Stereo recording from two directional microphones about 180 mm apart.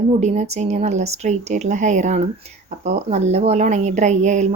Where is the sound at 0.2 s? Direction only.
40° right (ahead or behind).